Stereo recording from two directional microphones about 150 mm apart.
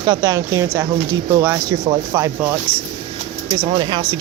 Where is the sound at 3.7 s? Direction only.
30° right (ahead or behind).